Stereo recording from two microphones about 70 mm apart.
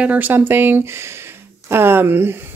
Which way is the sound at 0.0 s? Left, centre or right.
Right.